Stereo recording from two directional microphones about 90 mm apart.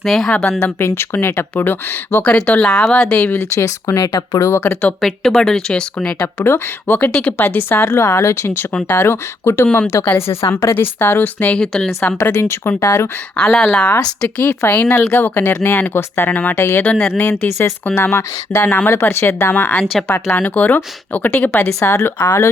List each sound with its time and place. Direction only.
0.0 s a woman's voice: centre (ahead or behind)
0.8 s speech: 25° left (ahead or behind)
3.3 s speech: 35° left (ahead or behind)
4.9 s speech: centre (ahead or behind)
6.4 s speech: 25° left (ahead or behind)
7.1 s speech: 10° left (ahead or behind)
7.3 s speech: 25° left (ahead or behind)
11.6 s speech: 5° left (ahead or behind)
12.3 s speech: 30° left (ahead or behind)
13.3 s speech: 15° left (ahead or behind)
16.8 s speech: 10° left (ahead or behind)
17.1 s speech: 25° left (ahead or behind)
19.8 s a woman's voice: centre (ahead or behind)
20.1 s speech: 20° left (ahead or behind)